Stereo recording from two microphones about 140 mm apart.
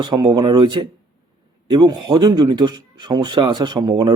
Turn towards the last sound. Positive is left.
turn(degrees=-30)  # may be behind; listen again after turning